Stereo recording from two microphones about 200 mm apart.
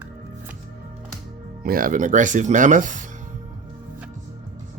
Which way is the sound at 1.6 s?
45° right (ahead or behind).